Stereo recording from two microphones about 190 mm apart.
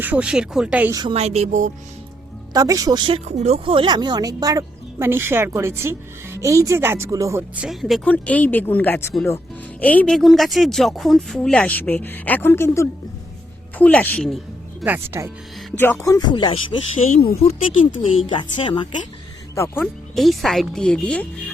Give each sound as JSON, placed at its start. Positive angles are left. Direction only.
{"t": 0.0, "sound": "speech", "side_deg": -5}
{"t": 0.9, "sound": "speech", "side_deg": -30}
{"t": 2.5, "sound": "speech", "side_deg": -20}
{"t": 3.2, "sound": "speech", "side_deg": -35}
{"t": 14.8, "sound": "speech", "side_deg": -10}
{"t": 15.8, "sound": "music", "side_deg": 15}
{"t": 17.0, "sound": "speech", "side_deg": 40}
{"t": 18.3, "sound": "music", "side_deg": 25}
{"t": 19.5, "sound": "speech", "side_deg": 15}
{"t": 20.1, "sound": "speech", "side_deg": 0}